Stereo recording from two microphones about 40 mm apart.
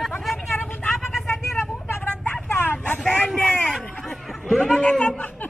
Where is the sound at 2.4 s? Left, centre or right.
Left.